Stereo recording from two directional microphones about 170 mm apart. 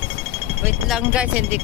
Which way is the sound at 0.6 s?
5° right (ahead or behind).